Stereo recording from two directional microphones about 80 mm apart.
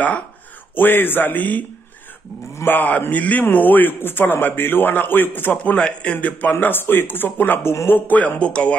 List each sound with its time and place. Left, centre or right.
0.7 s a man's voice: left